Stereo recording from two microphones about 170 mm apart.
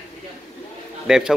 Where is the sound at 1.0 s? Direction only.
5° right (ahead or behind).